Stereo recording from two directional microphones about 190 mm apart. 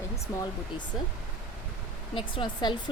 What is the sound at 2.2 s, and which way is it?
Speech, 25° left (ahead or behind).